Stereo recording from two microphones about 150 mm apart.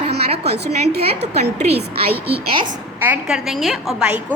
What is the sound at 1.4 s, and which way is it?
Speech, 50° right (ahead or behind).